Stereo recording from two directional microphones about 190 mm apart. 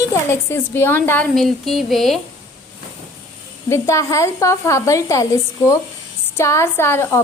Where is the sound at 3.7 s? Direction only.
15° left (ahead or behind).